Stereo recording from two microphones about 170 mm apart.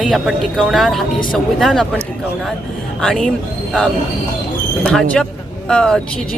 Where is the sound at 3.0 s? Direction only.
Centre (ahead or behind).